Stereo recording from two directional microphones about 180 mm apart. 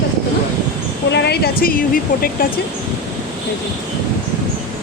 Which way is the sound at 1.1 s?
65° left (ahead or behind).